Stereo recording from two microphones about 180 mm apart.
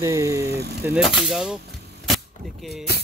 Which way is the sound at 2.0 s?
Centre (ahead or behind).